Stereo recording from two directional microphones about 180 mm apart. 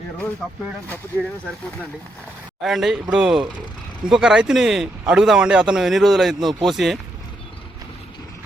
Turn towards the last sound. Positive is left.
turn(degrees=0)  # may be behind; listen again after turning